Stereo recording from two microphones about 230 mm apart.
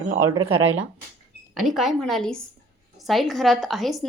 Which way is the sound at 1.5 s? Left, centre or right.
Centre.